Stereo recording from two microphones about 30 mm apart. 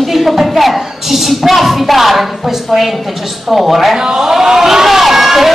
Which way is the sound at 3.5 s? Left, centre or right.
Centre.